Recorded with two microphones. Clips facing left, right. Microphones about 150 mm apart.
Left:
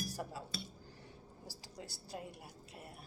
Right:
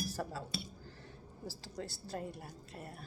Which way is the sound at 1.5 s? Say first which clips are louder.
Right 7 dB; 15° left (ahead or behind).